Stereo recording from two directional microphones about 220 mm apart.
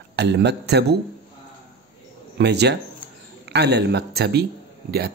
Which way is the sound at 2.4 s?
50° right (ahead or behind).